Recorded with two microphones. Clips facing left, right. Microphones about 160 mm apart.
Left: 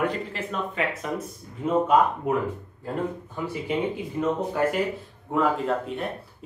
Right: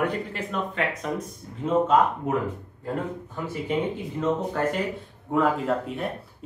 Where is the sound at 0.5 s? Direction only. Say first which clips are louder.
Even; centre (ahead or behind).